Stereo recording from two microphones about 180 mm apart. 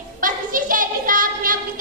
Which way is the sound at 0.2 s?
50° right (ahead or behind).